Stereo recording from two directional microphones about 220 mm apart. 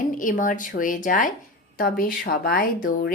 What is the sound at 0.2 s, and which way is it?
A woman's voice, 35° left (ahead or behind).